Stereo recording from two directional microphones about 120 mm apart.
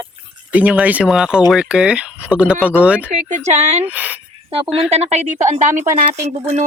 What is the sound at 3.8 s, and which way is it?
Speech, 10° right (ahead or behind).